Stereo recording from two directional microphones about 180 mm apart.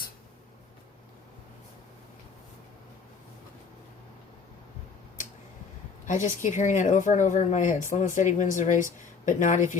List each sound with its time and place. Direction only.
6.1 s a woman's voice: 45° left (ahead or behind)